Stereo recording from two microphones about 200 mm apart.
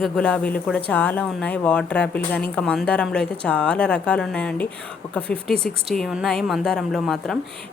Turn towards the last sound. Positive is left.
turn(degrees=0)  # may be behind; listen again after turning